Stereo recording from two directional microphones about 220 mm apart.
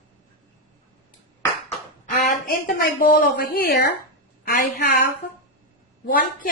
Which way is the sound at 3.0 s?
40° left (ahead or behind).